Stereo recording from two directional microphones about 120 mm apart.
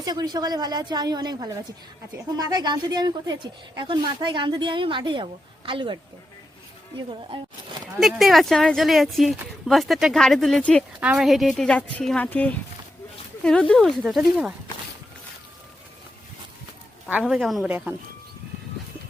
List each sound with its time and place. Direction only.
0.0 s a woman's voice: 35° right (ahead or behind)
7.9 s speech: centre (ahead or behind)
11.0 s speech: 5° right (ahead or behind)
17.1 s speech: 5° right (ahead or behind)
17.7 s speech: 15° right (ahead or behind)